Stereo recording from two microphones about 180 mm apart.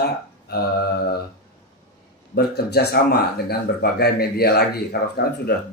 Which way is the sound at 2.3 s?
65° left (ahead or behind).